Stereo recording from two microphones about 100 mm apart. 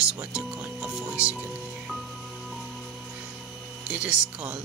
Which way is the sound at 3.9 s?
10° right (ahead or behind).